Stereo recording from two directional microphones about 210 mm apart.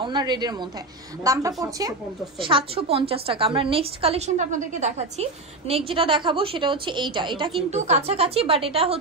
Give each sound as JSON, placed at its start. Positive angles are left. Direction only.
{"t": 0.0, "sound": "a woman's voice", "side_deg": -20}